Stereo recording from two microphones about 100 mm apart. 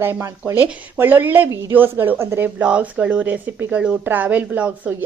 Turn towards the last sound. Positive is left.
turn(degrees=-15)  # may be behind; listen again after turning